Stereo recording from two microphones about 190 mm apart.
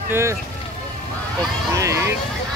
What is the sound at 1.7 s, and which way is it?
Speech, 15° right (ahead or behind).